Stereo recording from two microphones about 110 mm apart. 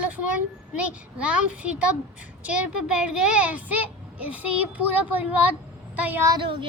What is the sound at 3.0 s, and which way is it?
A child's voice, 10° right (ahead or behind).